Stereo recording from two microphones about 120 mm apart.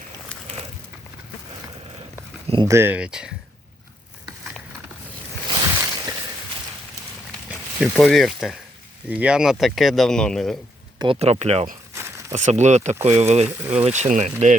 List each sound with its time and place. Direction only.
2.6 s speech: 20° right (ahead or behind)
3.0 s speech: 5° right (ahead or behind)
5.5 s a sound: 35° right (ahead or behind)
7.8 s speech: centre (ahead or behind)
9.0 s speech: 10° right (ahead or behind)
11.2 s speech: 60° right (ahead or behind)
13.1 s speech: 65° right (ahead or behind); by 14.5 s 85° right